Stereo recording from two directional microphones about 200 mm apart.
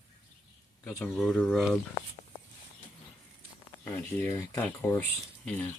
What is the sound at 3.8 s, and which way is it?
Speech, 10° left (ahead or behind).